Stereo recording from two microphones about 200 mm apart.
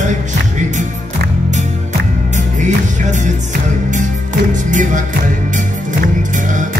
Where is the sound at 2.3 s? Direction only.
40° right (ahead or behind).